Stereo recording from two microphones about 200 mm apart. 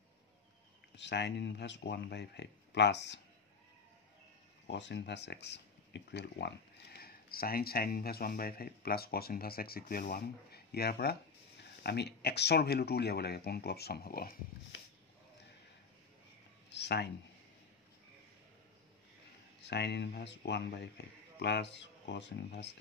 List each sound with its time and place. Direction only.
0.9 s speech: 60° left (ahead or behind)
4.6 s speech: 60° left (ahead or behind)
16.6 s a sound: 60° left (ahead or behind)
19.6 s speech: 60° left (ahead or behind)